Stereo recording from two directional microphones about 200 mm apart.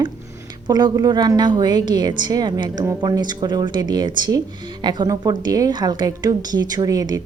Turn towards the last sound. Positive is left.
turn(degrees=-15)  # may be behind; listen again after turning